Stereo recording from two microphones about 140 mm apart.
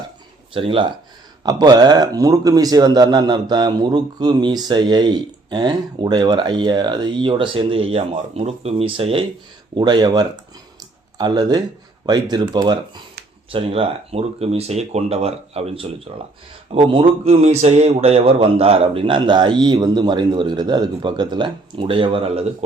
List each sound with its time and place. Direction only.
0.5 s a man's voice: 40° right (ahead or behind)
9.7 s a man's voice: 30° right (ahead or behind)